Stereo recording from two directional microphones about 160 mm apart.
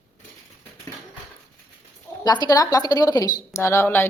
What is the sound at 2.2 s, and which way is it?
A woman's voice, 25° left (ahead or behind).